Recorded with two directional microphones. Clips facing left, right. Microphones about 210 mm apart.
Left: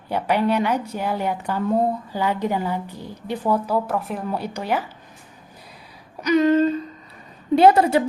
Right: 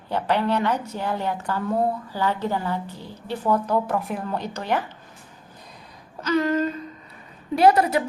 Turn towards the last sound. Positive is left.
turn(degrees=25)  # may be behind; listen again after turning